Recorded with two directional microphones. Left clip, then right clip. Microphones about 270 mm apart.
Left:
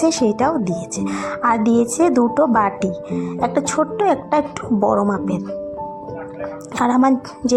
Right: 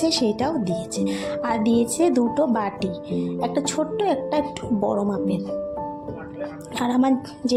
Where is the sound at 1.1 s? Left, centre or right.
Centre.